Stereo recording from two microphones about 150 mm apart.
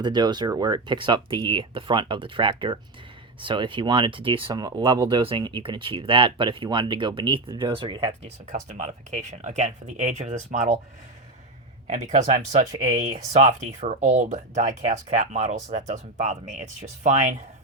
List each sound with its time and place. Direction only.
0.0 s speech: 30° right (ahead or behind); by 10.8 s 50° right (ahead or behind)
11.9 s speech: 50° right (ahead or behind)